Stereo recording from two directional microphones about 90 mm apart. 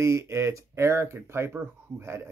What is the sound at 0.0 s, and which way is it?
Speech, 30° right (ahead or behind).